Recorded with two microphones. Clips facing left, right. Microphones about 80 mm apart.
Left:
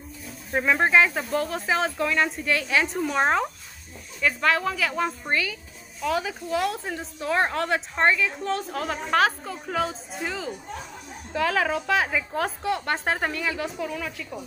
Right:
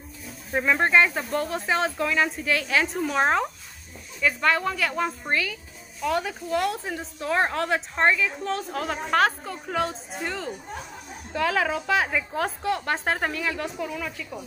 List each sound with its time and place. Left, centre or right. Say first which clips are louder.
0.5 s speech: even; centre